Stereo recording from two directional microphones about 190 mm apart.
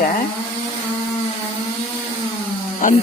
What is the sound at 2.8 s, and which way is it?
Speech, 45° left (ahead or behind).